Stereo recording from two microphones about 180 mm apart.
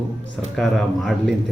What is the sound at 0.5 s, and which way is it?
Speech, centre (ahead or behind).